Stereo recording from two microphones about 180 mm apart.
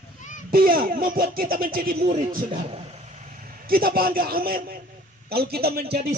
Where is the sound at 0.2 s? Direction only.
45° left (ahead or behind).